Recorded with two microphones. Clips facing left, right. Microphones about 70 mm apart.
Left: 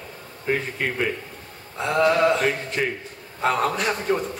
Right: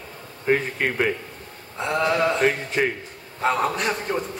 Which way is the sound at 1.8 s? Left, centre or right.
Centre.